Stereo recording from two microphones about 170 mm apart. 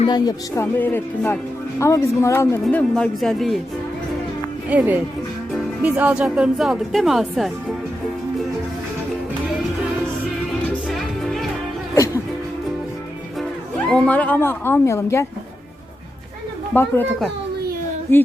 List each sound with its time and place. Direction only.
0.0 s speech: 25° left (ahead or behind)
2.6 s speech: 5° left (ahead or behind)
4.7 s speech: 10° right (ahead or behind)
10.5 s music: centre (ahead or behind)
13.9 s speech: 5° left (ahead or behind)
16.7 s speech: 10° left (ahead or behind)